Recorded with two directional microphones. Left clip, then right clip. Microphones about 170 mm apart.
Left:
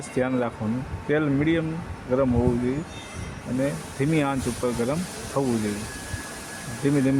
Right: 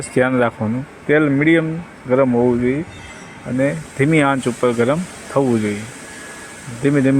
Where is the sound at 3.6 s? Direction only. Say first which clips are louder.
Right 10 dB; 35° right (ahead or behind).